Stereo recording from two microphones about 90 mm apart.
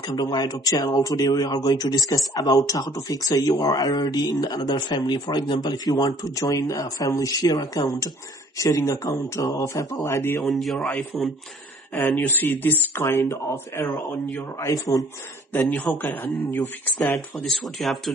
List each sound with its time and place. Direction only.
0.0 s speech: 55° left (ahead or behind); by 10.4 s 30° left (ahead or behind)
10.4 s speech: centre (ahead or behind)
12.2 s speech: 20° left (ahead or behind)
14.7 s speech: 40° left (ahead or behind)
15.6 s a man's voice: 15° left (ahead or behind)
16.2 s speech: 30° left (ahead or behind)
17.4 s speech: centre (ahead or behind)